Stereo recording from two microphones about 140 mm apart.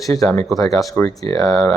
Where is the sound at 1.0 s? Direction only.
25° left (ahead or behind).